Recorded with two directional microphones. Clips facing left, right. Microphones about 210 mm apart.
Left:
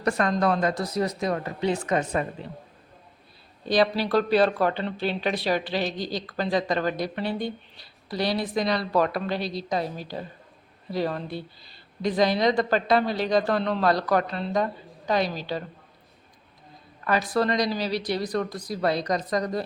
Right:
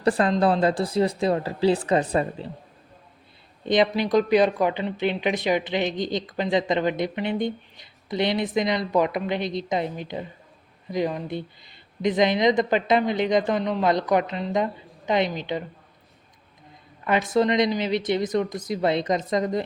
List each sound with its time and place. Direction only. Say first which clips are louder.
0.0 s speech: right 3 dB; 30° right (ahead or behind)
3.7 s speech: right 2 dB; 20° right (ahead or behind)
17.0 s speech: right 3 dB; 20° right (ahead or behind)